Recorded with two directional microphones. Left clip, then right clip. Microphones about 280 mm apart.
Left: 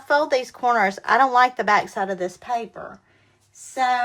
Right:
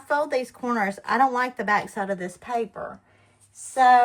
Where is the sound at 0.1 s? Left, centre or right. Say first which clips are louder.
Left 4 dB; left.